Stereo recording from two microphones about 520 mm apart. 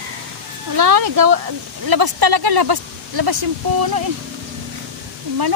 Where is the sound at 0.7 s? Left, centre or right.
Right.